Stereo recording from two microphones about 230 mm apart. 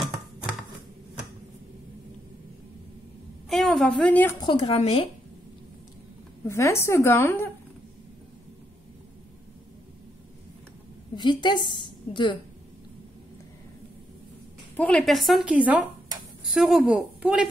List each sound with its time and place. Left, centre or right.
3.4 s a woman's voice: centre
4.4 s a woman's voice: left
6.4 s a woman's voice: centre
11.1 s a woman's voice: centre
14.8 s a woman's voice: centre